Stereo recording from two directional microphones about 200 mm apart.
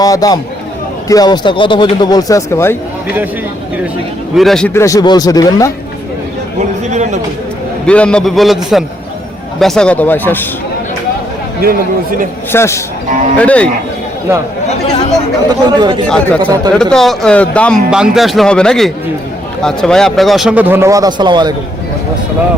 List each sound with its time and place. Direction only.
0.0 s speech: 20° left (ahead or behind)
4.4 s a man's voice: centre (ahead or behind); by 5.7 s 15° left (ahead or behind)
6.9 s a sound: 35° right (ahead or behind)
7.9 s a man's voice: 5° left (ahead or behind)
11.6 s speech: 45° right (ahead or behind)
12.5 s a man's voice: 15° left (ahead or behind)
15.4 s speech: 20° right (ahead or behind)
16.0 s speech: 5° left (ahead or behind)
16.4 s speech: 20° right (ahead or behind)
16.7 s speech: centre (ahead or behind); by 21.5 s 20° right (ahead or behind)